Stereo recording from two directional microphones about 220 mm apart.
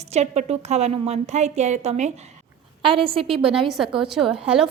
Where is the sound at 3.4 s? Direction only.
Centre (ahead or behind).